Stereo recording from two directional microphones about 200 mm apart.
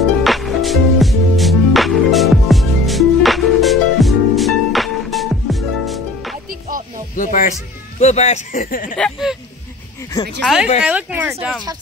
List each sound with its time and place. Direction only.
0.2 s music: centre (ahead or behind)
7.2 s music: 40° left (ahead or behind)
8.0 s speech: 35° left (ahead or behind)
8.9 s speech: centre (ahead or behind)
10.4 s speech: 5° right (ahead or behind)